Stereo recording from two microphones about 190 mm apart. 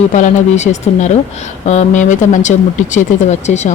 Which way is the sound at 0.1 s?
40° left (ahead or behind).